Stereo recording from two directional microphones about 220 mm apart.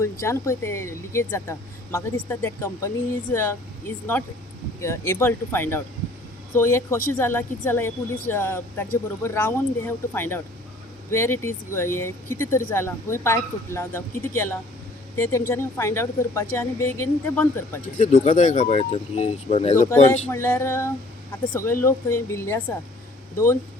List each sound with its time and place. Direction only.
0.0 s speech: 15° left (ahead or behind)
17.9 s speech: 35° left (ahead or behind)
20.2 s speech: 10° left (ahead or behind)